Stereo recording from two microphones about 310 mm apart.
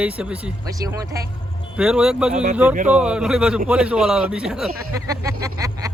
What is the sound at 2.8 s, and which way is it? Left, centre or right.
Speech, centre.